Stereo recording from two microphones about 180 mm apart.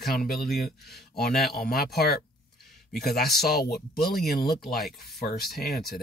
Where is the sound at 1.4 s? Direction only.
60° left (ahead or behind).